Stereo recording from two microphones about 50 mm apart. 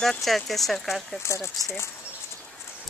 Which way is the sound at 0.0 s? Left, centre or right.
Centre.